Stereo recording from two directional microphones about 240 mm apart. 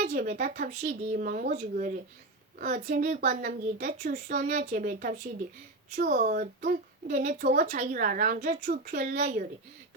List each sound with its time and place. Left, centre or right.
0.1 s a woman's voice: right